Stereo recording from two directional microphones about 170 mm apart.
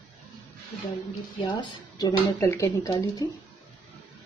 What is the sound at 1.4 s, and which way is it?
Speech, 25° left (ahead or behind).